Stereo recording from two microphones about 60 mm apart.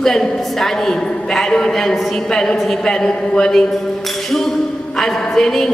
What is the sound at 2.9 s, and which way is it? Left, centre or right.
Speech, centre.